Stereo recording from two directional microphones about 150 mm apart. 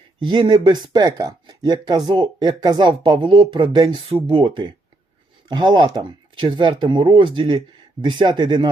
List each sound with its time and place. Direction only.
0.2 s speech: 30° right (ahead or behind)